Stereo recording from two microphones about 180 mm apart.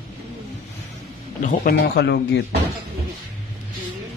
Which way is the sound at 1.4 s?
55° left (ahead or behind).